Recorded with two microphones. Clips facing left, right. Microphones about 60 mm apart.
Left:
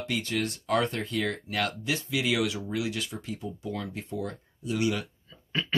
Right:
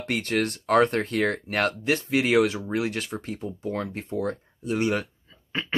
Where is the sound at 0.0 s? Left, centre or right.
Right.